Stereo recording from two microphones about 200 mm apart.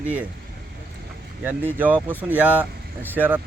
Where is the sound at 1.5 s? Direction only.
10° right (ahead or behind).